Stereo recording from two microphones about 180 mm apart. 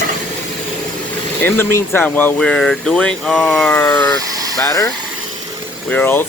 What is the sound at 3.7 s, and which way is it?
Speech, 15° left (ahead or behind).